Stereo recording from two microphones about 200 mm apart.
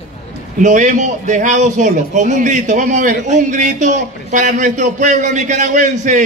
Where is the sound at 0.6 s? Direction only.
40° right (ahead or behind).